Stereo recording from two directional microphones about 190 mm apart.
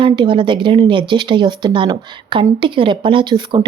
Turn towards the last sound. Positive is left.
turn(degrees=-25)  # may be behind; listen again after turning